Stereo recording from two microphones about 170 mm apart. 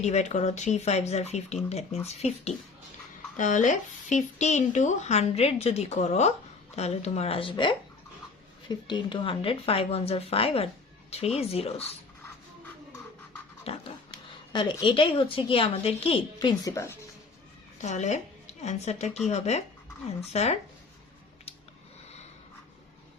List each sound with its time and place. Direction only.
0.0 s speech: 40° left (ahead or behind)
8.9 s speech: 30° left (ahead or behind)
13.7 s dog: 35° left (ahead or behind)
14.5 s a woman's voice: 30° left (ahead or behind)
17.8 s a woman's voice: 45° left (ahead or behind)